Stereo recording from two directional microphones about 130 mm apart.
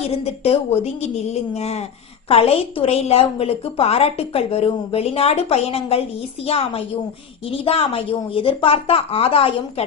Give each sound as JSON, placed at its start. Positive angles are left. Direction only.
{"t": 0.0, "sound": "a woman's voice", "side_deg": 50}